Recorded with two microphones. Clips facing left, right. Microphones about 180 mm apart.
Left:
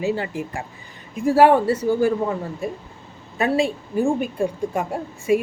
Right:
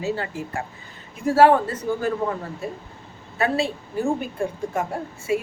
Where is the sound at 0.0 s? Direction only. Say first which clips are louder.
Left 3 dB; 15° left (ahead or behind).